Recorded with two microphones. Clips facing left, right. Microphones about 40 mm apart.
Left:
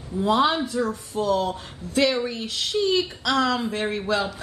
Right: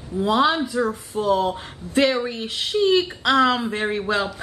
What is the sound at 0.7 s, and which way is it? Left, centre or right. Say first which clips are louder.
Speech: right 2 dB; right.